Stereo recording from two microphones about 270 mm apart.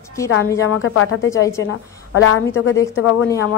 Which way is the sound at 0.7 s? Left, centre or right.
Left.